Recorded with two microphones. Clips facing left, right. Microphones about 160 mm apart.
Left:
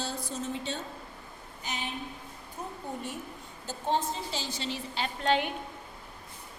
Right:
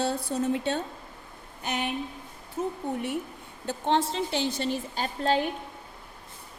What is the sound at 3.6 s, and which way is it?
A woman's voice, 80° right.